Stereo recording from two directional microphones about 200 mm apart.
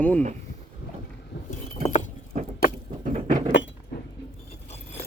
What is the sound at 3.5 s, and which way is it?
Chink, 60° left (ahead or behind).